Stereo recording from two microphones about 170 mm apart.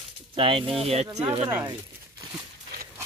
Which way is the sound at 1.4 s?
15° right (ahead or behind).